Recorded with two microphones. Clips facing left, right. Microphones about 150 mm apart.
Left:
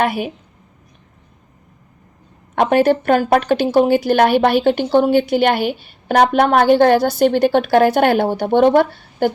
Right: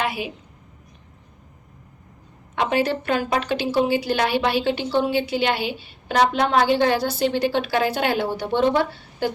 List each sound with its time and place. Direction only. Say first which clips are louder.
0.0 s a woman's voice: left 7 dB; 55° left (ahead or behind)
2.6 s a woman's voice: left 8 dB; 50° left (ahead or behind)